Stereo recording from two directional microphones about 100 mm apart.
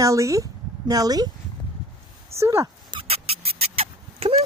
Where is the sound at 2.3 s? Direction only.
30° right (ahead or behind).